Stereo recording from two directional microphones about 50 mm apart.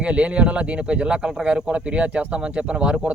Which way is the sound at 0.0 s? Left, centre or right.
Right.